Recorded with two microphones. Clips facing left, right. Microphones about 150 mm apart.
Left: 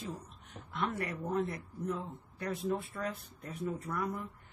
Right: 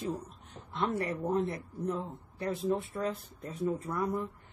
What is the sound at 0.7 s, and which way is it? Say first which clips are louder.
Speech: right 4 dB; 30° right (ahead or behind).